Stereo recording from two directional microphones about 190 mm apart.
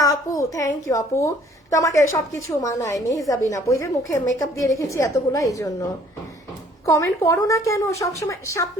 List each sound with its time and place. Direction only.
0.0 s a woman's voice: 20° left (ahead or behind)
6.8 s a woman's voice: 15° left (ahead or behind)